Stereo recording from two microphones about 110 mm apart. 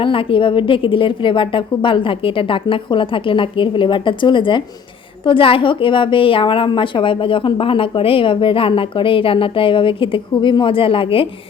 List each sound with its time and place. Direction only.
0.0 s a woman's voice: 55° left (ahead or behind)